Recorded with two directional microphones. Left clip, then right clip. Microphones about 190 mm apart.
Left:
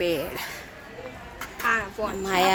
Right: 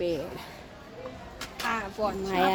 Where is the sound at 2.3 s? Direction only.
5° right (ahead or behind).